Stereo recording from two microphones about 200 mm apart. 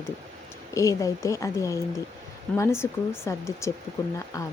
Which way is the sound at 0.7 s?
15° left (ahead or behind).